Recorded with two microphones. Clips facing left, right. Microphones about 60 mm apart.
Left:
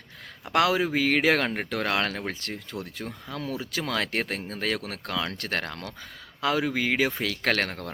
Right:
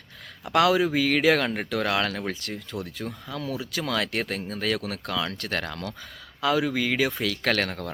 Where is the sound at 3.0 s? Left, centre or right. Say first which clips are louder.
Right 3 dB; centre.